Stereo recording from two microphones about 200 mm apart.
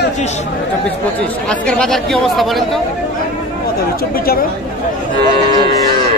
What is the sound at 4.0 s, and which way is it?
Speech, 50° left (ahead or behind).